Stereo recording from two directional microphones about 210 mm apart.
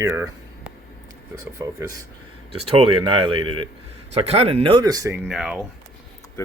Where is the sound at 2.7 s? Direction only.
25° right (ahead or behind).